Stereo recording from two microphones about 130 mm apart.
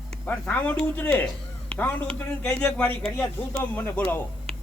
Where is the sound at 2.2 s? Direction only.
10° left (ahead or behind).